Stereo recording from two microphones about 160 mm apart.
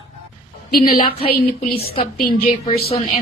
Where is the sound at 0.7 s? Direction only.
65° left (ahead or behind).